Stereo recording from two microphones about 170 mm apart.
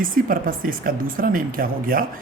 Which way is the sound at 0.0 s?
55° right (ahead or behind).